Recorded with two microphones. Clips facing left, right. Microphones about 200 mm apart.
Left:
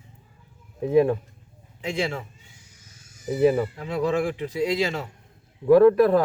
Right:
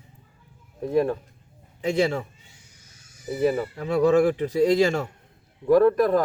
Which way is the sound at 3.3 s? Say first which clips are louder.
Left 3 dB; 5° left (ahead or behind).